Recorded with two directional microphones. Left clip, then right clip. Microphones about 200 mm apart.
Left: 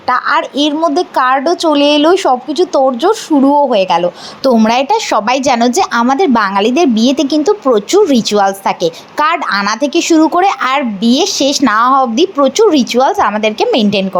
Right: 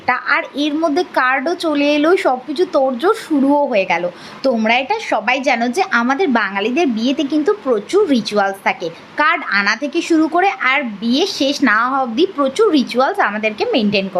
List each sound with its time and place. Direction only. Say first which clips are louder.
0.1 s a woman's voice: left 5 dB; 20° left (ahead or behind)